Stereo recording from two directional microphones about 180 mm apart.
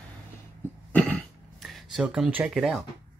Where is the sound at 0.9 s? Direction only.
5° left (ahead or behind).